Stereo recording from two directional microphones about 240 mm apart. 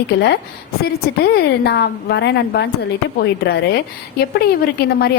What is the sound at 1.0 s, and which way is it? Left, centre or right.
A woman's voice, left.